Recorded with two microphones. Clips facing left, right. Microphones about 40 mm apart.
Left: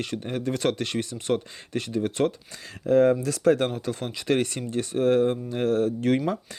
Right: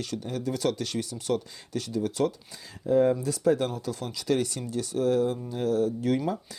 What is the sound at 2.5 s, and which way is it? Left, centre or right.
Speech, left.